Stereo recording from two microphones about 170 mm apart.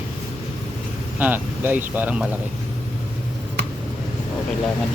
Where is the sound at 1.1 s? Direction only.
10° right (ahead or behind).